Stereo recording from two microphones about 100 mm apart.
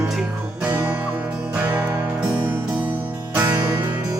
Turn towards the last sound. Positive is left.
turn(degrees=-15)  # may be behind; listen again after turning